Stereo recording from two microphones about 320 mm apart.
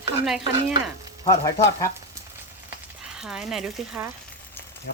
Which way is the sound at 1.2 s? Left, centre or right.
Centre.